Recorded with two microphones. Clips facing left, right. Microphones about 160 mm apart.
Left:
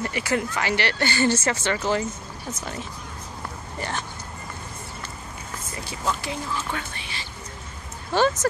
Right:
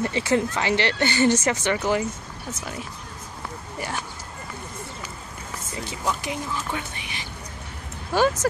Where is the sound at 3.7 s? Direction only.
10° right (ahead or behind).